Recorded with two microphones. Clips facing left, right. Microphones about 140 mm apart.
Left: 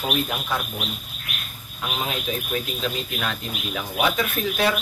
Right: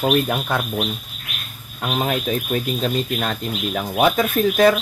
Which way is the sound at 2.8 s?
40° right (ahead or behind).